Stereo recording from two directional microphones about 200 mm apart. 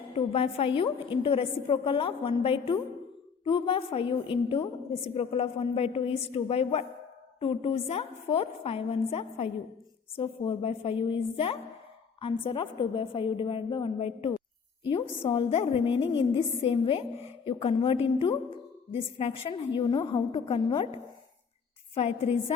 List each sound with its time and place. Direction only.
0.3 s a woman's voice: 30° left (ahead or behind)